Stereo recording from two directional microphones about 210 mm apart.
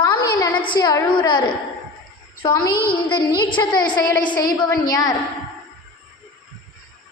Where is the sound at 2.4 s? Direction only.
20° left (ahead or behind).